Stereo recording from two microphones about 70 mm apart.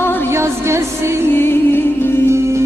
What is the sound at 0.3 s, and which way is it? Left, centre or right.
Music, right.